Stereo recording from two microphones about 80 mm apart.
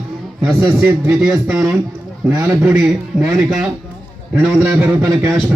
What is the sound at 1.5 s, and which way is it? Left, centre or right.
Speech, centre.